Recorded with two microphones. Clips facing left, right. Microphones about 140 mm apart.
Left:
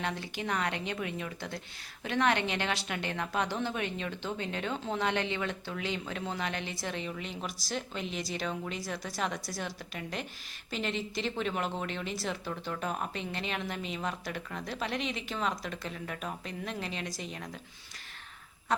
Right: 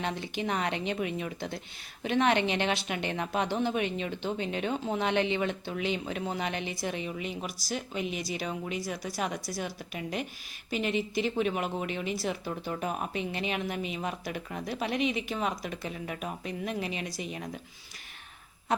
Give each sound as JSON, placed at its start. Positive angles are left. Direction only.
{"t": 0.0, "sound": "a woman's voice", "side_deg": -20}